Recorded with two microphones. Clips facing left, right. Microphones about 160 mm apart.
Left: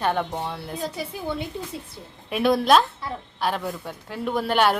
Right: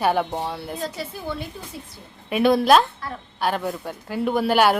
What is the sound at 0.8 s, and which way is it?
Speech, 15° left (ahead or behind).